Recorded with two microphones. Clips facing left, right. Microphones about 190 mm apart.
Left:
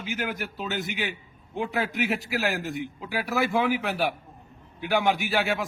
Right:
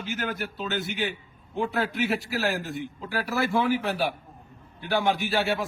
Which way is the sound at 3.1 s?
15° left (ahead or behind).